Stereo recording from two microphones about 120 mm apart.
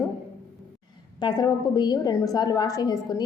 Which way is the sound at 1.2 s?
35° left (ahead or behind).